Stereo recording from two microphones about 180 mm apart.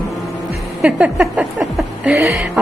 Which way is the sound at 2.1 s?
15° right (ahead or behind).